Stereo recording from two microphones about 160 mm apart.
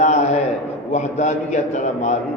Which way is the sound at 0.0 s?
45° left (ahead or behind).